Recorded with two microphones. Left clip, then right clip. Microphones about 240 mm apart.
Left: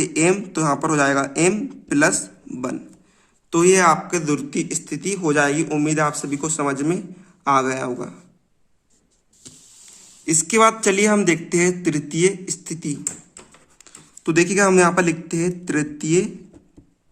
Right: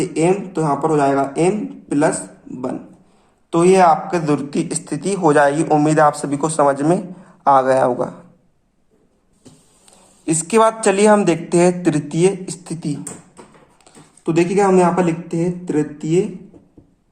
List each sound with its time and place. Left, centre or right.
0.0 s a man's voice: left; by 8.2 s centre
10.2 s a man's voice: centre
13.8 s speech: left